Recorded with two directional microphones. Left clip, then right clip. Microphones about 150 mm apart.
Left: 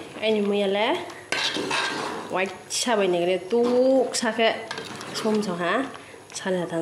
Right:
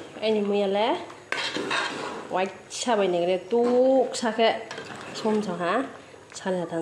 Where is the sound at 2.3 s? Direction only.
Centre (ahead or behind).